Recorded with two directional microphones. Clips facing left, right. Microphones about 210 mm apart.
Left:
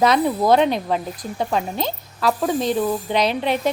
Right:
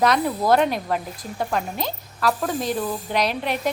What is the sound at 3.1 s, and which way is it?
Speech, centre (ahead or behind).